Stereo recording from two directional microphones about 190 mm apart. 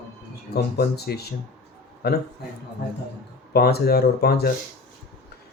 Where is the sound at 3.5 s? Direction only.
55° left (ahead or behind).